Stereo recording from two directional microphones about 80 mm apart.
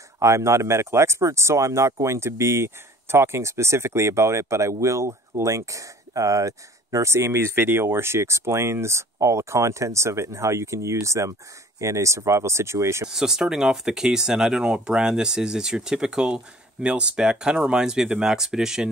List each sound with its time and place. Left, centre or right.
0.2 s speech: right
13.1 s speech: centre